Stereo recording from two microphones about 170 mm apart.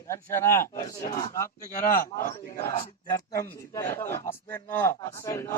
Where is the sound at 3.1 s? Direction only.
20° left (ahead or behind).